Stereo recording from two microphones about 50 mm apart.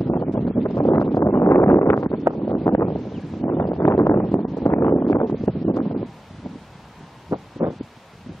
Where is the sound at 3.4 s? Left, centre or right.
Left.